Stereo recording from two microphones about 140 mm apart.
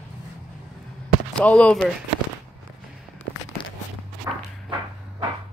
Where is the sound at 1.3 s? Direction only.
10° left (ahead or behind).